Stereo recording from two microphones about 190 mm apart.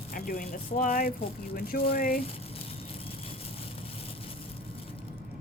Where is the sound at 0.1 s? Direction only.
50° left (ahead or behind).